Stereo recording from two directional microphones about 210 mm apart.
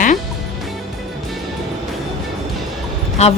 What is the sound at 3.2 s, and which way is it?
Speech, 30° left (ahead or behind).